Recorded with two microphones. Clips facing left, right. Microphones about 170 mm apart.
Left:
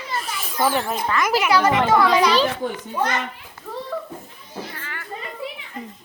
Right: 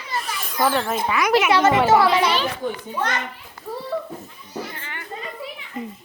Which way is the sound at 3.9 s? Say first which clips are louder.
Right 3 dB; 10° right (ahead or behind).